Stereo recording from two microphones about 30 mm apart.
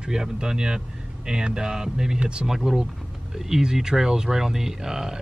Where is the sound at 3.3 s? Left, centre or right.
Centre.